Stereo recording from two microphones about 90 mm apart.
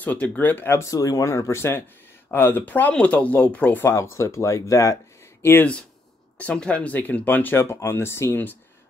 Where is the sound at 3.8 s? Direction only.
30° left (ahead or behind).